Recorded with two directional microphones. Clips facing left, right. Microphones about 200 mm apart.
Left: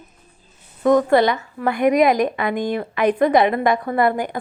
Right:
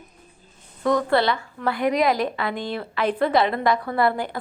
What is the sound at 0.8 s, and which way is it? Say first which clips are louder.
A woman's voice: left 5 dB; 15° left (ahead or behind).